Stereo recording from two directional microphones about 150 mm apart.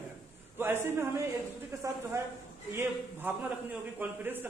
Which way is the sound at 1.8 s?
20° right (ahead or behind).